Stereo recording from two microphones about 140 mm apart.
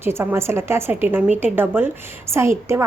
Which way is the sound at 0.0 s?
15° right (ahead or behind).